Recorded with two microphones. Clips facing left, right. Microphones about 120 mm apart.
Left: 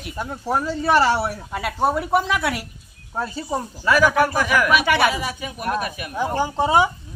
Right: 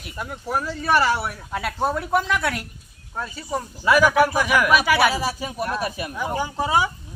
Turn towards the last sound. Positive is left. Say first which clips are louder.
# left 4 dB
turn(degrees=25)  # may be behind; listen again after turning